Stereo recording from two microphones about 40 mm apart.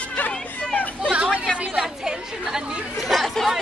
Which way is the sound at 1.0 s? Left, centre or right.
Right.